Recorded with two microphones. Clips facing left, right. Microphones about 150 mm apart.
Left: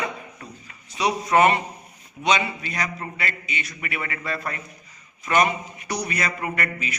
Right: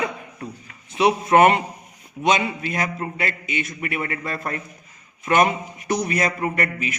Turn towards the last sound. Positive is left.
turn(degrees=-45)  # may be behind; listen again after turning